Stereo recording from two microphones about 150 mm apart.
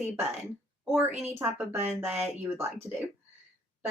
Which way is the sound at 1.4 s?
20° right (ahead or behind).